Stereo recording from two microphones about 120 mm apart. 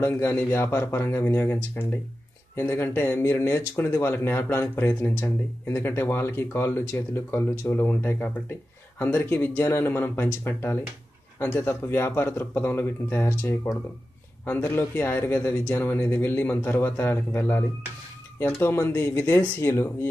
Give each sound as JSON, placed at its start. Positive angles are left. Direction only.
{"t": 0.0, "sound": "speech", "side_deg": 20}